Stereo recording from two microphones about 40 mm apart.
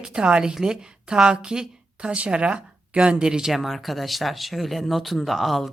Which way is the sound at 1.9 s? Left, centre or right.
Right.